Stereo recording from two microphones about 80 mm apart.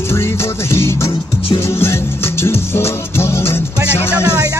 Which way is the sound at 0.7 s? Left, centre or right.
Left.